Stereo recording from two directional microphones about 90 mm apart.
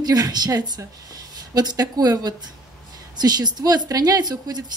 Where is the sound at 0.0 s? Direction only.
45° right (ahead or behind).